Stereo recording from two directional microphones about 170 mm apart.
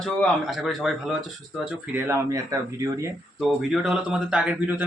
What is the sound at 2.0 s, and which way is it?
Speech, 15° right (ahead or behind).